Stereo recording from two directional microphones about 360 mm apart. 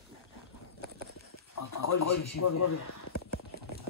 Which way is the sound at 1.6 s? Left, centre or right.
Left.